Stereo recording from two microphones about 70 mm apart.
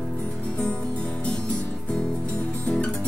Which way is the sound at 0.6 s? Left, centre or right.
Centre.